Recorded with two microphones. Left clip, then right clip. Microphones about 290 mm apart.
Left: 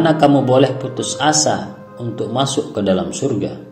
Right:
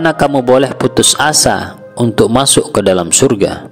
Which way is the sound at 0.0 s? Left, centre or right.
Right.